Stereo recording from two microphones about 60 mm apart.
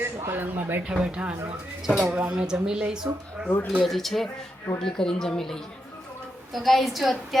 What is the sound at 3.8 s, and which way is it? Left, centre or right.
A woman's voice, centre.